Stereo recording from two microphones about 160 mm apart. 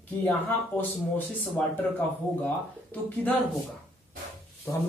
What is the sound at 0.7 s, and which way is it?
Speech, 10° left (ahead or behind).